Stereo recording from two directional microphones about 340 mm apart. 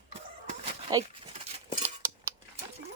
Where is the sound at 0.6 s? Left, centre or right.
Centre.